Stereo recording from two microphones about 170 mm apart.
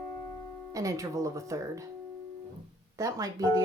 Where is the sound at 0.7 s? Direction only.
20° right (ahead or behind).